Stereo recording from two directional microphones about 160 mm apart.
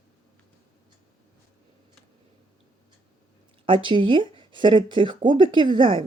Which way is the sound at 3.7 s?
30° right (ahead or behind).